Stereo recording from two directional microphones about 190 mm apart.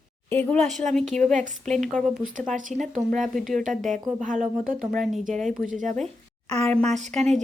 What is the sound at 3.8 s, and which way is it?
Speech, 40° right (ahead or behind).